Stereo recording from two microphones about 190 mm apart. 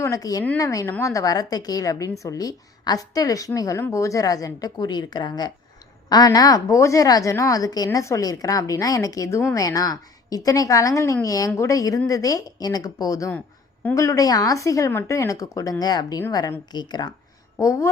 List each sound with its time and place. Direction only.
0.0 s a woman's voice: 15° left (ahead or behind)